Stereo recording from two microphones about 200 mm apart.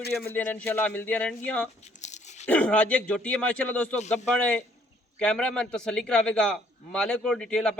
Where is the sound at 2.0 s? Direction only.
35° left (ahead or behind).